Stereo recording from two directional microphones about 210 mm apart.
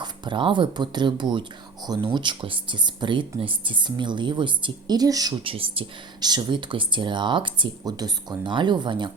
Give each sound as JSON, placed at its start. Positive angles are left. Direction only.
{"t": 0.0, "sound": "speech", "side_deg": -25}